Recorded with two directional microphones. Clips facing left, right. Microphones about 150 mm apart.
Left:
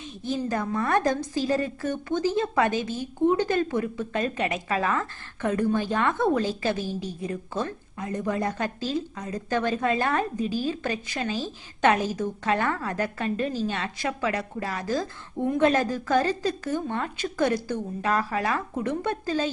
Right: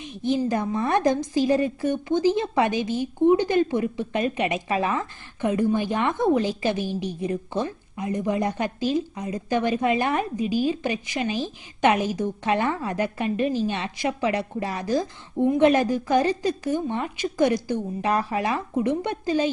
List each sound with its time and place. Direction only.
0.0 s a woman's voice: 15° right (ahead or behind)